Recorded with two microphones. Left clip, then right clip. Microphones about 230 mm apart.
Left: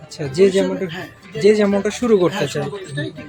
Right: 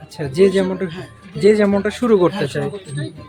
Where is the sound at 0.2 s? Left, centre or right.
Centre.